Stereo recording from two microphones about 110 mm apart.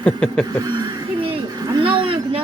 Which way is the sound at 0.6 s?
35° right (ahead or behind).